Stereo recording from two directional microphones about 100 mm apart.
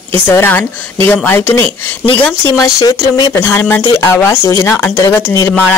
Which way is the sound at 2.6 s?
35° left (ahead or behind).